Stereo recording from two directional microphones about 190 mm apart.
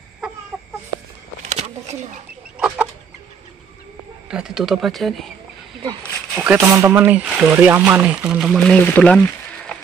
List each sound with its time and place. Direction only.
1.5 s a sound: 35° right (ahead or behind)
4.3 s speech: 5° right (ahead or behind)
6.3 s speech: 5° right (ahead or behind)